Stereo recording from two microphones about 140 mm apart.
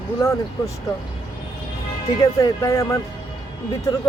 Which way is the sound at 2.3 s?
25° left (ahead or behind).